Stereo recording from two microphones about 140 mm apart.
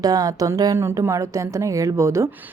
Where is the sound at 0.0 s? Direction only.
25° right (ahead or behind).